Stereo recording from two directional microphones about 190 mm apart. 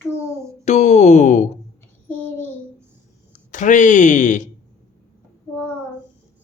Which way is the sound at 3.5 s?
40° left (ahead or behind).